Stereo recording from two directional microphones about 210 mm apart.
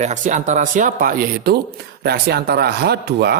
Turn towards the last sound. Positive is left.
turn(degrees=-50)  # may be behind; listen again after turning